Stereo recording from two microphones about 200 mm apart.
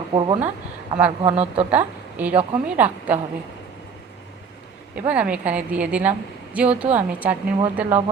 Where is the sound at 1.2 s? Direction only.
30° right (ahead or behind).